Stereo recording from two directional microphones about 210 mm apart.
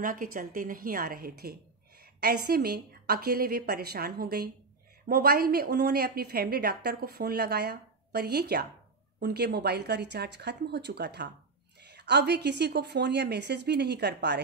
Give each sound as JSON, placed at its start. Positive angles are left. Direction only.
{"t": 0.0, "sound": "a woman's voice", "side_deg": -40}